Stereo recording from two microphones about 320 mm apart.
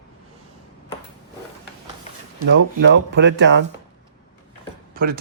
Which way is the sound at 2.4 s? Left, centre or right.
Right.